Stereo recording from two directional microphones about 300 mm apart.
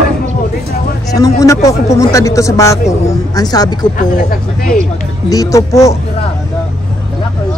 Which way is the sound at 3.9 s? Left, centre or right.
Left.